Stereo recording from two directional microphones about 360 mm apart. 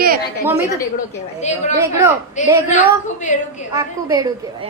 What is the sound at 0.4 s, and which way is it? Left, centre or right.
Speech, centre.